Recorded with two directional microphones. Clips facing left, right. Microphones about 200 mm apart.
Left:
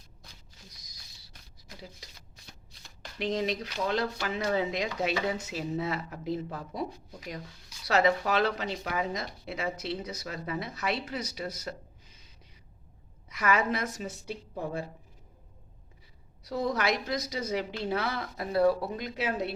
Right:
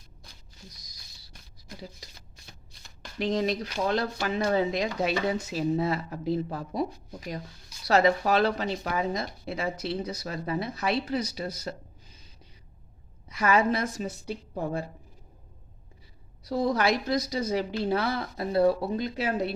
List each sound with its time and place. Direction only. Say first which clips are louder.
3.2 s a woman's voice: right 3 dB; 40° right (ahead or behind)
13.2 s a woman's voice: right 4 dB; 30° right (ahead or behind)
16.4 s a woman's voice: right 4 dB; 35° right (ahead or behind)